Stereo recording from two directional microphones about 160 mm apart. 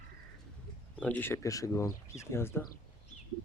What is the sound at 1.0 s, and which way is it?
Speech, 10° left (ahead or behind).